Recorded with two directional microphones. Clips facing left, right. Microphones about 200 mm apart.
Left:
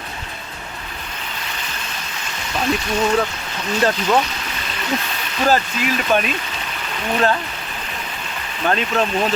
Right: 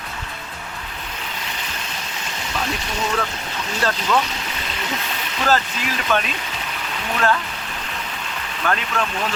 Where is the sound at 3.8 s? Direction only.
20° left (ahead or behind).